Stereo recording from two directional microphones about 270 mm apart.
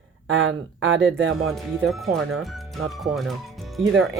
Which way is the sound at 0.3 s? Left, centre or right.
Right.